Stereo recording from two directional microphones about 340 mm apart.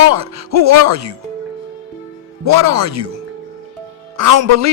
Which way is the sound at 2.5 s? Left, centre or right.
Right.